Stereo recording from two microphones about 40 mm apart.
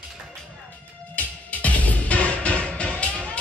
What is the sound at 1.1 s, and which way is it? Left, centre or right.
Music, left.